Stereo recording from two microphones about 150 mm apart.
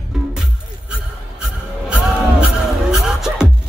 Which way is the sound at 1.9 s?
5° right (ahead or behind).